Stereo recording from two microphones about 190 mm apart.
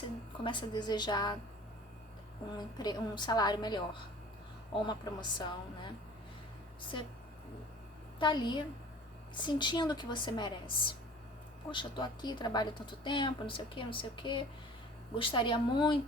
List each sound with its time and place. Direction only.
0.4 s speech: 25° left (ahead or behind)
2.6 s speech: 20° left (ahead or behind)
4.9 s speech: 25° left (ahead or behind)
8.2 s speech: 25° left (ahead or behind)